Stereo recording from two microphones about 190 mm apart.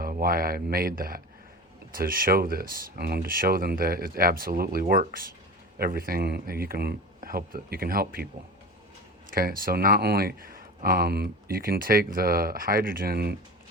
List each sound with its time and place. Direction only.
0.0 s speech: 50° right (ahead or behind)
9.3 s speech: 50° right (ahead or behind)